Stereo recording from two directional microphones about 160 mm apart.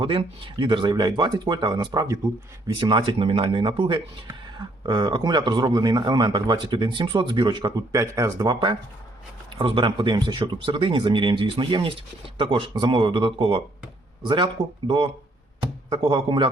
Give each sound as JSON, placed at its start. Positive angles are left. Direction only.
{"t": 0.0, "sound": "speech", "side_deg": -35}
{"t": 9.5, "sound": "speech", "side_deg": -30}